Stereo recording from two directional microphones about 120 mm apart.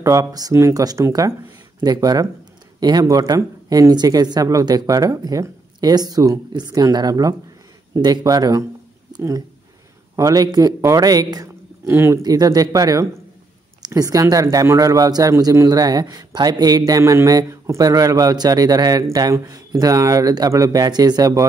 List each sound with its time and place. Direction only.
0.0 s speech: 25° right (ahead or behind)
10.1 s a man's voice: 30° right (ahead or behind)
12.2 s speech: 30° right (ahead or behind)